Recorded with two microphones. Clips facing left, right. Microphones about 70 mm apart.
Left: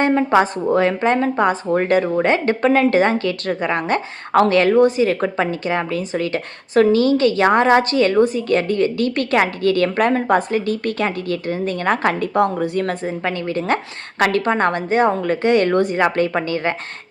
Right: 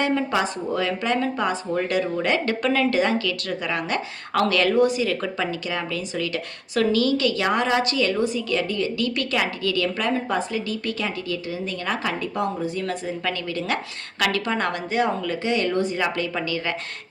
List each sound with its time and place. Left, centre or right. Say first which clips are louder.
0.0 s speech: left 7 dB; left